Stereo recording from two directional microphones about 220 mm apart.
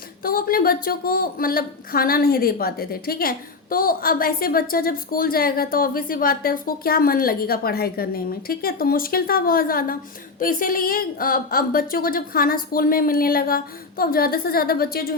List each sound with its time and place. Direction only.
0.2 s a woman's voice: 40° left (ahead or behind)